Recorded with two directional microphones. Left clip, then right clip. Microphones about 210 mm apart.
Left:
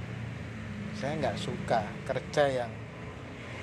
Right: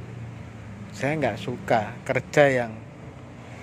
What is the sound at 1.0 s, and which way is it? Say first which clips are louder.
Speech: right 7 dB; 40° right (ahead or behind).